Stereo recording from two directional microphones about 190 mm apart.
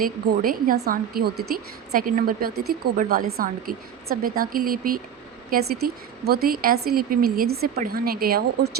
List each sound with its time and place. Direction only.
0.0 s a woman's voice: 50° right (ahead or behind)